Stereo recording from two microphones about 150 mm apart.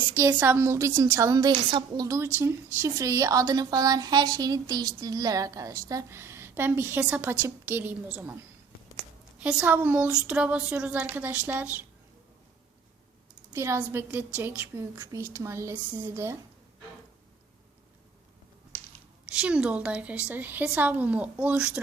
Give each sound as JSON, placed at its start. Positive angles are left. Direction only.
{"t": 0.1, "sound": "a woman's voice", "side_deg": -20}
{"t": 1.5, "sound": "a woman's voice", "side_deg": -35}
{"t": 2.0, "sound": "a woman's voice", "side_deg": -20}
{"t": 13.5, "sound": "a woman's voice", "side_deg": -20}
{"t": 19.2, "sound": "a woman's voice", "side_deg": -5}